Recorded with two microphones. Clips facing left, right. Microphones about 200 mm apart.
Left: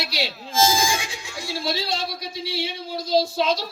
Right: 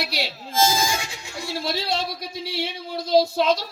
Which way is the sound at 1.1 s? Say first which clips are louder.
Right 1 dB; 60° right (ahead or behind).